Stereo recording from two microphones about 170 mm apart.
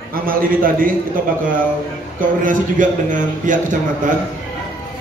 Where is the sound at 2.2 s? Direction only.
50° right (ahead or behind).